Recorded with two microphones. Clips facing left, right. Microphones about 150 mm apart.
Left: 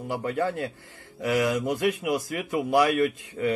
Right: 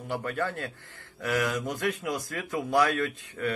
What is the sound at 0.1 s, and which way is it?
Speech, 20° left (ahead or behind).